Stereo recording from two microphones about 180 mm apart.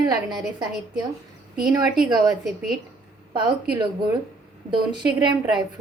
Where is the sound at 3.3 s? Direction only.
25° right (ahead or behind).